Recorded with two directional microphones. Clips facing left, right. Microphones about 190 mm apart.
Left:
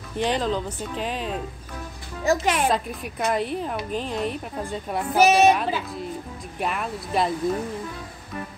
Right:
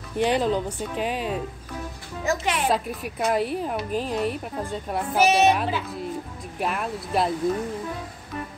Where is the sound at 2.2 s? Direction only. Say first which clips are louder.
Left 4 dB; 45° left (ahead or behind).